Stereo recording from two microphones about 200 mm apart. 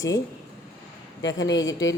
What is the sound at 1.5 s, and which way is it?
Speech, 15° left (ahead or behind).